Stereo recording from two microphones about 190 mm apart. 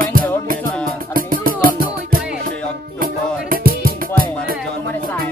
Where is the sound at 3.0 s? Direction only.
50° right (ahead or behind).